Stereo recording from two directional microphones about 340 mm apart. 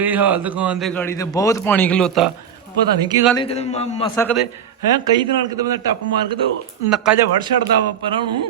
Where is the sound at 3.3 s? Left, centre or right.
Centre.